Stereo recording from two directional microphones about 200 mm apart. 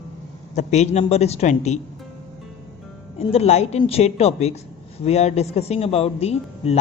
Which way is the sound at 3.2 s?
30° left (ahead or behind).